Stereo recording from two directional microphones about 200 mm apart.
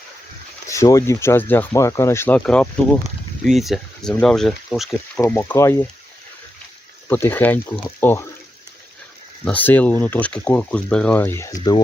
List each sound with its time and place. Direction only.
0.7 s speech: 15° left (ahead or behind)
7.1 s speech: 10° left (ahead or behind)
9.4 s speech: 10° left (ahead or behind)